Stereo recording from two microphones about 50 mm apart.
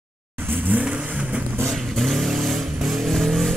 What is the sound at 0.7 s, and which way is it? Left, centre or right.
Vehicle, right.